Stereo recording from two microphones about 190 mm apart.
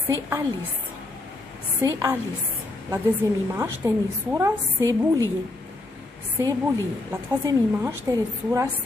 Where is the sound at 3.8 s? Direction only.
15° right (ahead or behind).